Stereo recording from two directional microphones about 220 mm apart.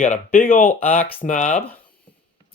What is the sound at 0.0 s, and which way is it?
Speech, 35° left (ahead or behind).